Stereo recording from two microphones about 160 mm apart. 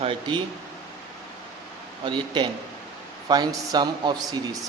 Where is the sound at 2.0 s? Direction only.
30° right (ahead or behind).